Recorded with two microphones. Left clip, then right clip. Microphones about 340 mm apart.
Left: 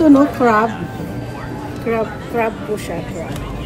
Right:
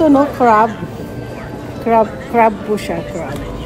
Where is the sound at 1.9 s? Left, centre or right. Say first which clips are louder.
Right 7 dB; right.